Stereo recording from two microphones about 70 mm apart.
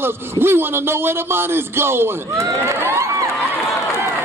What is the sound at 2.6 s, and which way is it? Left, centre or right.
Crowd, right.